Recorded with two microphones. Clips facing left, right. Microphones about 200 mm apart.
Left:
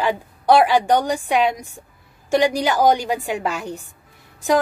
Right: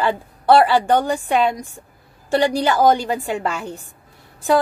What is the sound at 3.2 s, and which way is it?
Speech, centre (ahead or behind).